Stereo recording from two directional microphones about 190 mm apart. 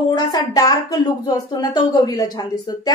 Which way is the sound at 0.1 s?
20° left (ahead or behind).